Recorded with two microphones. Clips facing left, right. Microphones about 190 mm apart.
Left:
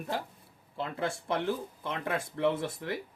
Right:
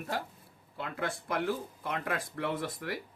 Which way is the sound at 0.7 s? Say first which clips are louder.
Left 3 dB; 30° left (ahead or behind).